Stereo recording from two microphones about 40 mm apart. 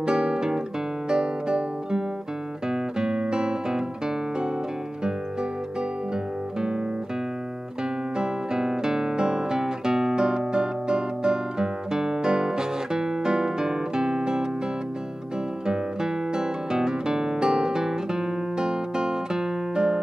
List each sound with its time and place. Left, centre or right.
0.0 s guitar: centre
1.0 s music: centre
8.2 s guitar: centre
15.6 s music: centre